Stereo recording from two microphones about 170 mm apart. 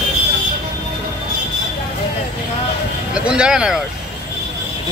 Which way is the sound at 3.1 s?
5° right (ahead or behind).